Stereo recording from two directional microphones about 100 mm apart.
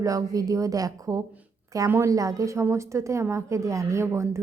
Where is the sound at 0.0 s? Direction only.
35° right (ahead or behind).